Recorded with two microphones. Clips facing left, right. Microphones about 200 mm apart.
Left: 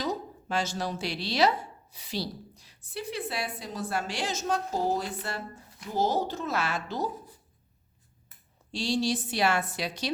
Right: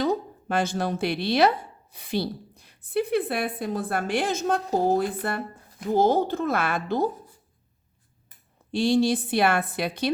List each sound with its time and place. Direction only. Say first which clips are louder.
0.0 s speech: right 7 dB; 55° right (ahead or behind)
8.7 s speech: right 7 dB; 55° right (ahead or behind)